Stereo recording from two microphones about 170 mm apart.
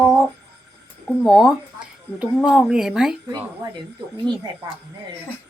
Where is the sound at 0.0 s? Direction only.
15° right (ahead or behind).